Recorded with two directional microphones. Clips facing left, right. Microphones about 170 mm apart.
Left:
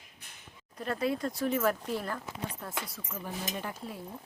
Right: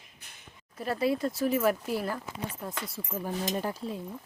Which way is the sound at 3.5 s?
35° right (ahead or behind).